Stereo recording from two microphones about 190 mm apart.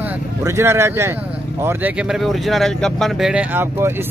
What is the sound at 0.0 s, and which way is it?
Speech, 15° right (ahead or behind).